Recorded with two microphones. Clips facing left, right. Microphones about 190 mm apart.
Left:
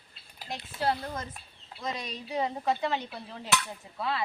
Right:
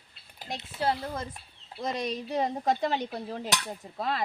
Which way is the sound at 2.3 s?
40° right (ahead or behind).